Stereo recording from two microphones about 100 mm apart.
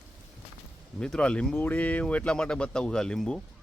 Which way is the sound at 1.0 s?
10° left (ahead or behind).